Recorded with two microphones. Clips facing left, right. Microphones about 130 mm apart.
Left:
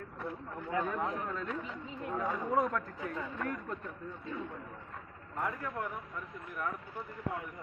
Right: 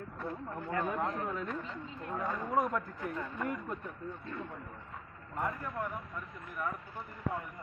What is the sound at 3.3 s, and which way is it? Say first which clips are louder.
Speech: right 1 dB; 10° right (ahead or behind).